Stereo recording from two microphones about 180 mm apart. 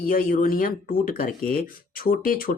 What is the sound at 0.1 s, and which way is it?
Speech, 50° left (ahead or behind).